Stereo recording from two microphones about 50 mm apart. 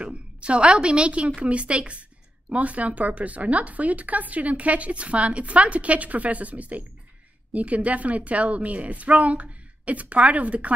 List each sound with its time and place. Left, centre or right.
0.0 s speech: right